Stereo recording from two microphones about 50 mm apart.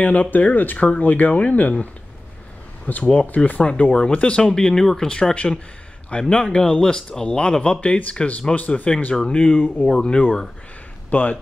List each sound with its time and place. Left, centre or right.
0.0 s speech: left
2.9 s speech: left
9.1 s speech: centre
9.4 s speech: left
9.8 s speech: centre
11.1 s speech: left